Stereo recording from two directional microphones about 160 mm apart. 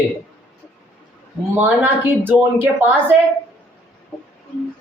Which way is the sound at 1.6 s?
15° right (ahead or behind).